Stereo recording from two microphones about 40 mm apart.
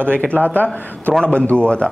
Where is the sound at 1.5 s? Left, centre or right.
Left.